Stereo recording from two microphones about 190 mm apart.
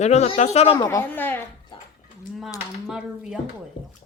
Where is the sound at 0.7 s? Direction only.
15° left (ahead or behind).